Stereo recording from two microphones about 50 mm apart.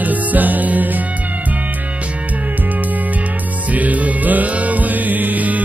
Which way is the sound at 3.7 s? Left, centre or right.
Right.